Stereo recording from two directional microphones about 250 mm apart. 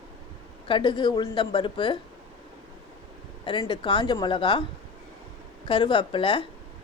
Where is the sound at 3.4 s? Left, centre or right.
Centre.